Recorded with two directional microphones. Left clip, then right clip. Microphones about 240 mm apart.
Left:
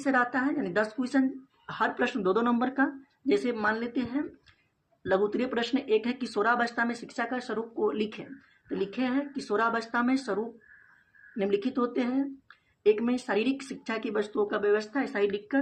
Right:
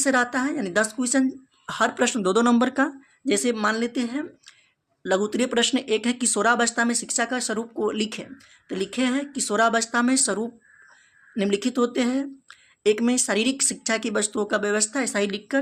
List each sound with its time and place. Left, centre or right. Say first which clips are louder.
0.0 s speech: right 4 dB; right